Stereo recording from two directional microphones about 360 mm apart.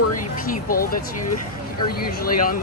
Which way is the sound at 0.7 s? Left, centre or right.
Left.